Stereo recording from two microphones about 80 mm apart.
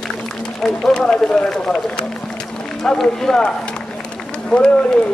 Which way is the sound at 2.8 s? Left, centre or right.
Centre.